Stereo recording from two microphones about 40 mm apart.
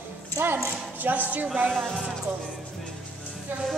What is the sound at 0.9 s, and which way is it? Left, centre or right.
Speech, right.